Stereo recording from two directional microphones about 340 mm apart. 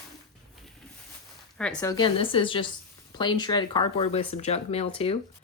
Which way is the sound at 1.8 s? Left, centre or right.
Centre.